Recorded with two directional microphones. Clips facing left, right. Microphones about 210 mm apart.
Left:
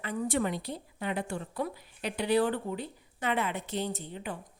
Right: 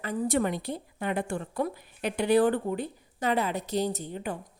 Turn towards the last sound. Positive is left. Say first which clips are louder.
# right 4 dB
turn(degrees=-45)  # may be behind; listen again after turning